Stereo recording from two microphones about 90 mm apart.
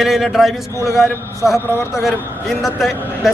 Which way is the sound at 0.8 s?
30° left (ahead or behind).